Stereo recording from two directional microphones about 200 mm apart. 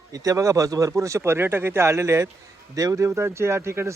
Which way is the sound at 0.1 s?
15° right (ahead or behind).